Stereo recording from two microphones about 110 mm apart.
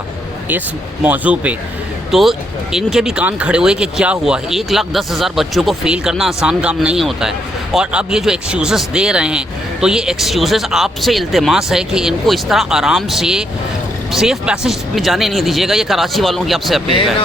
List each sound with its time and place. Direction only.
1.0 s speech: 15° right (ahead or behind)
2.0 s speech: centre (ahead or behind)